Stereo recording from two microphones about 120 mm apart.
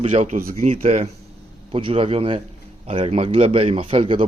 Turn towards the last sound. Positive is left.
turn(degrees=-45)  # may be behind; listen again after turning